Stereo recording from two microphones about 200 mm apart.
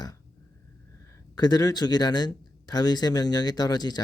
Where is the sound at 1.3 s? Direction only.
20° left (ahead or behind).